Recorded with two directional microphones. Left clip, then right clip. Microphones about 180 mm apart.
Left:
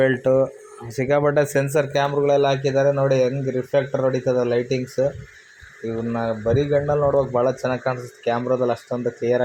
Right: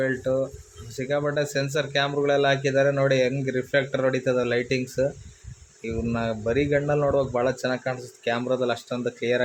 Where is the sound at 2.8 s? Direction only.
5° left (ahead or behind).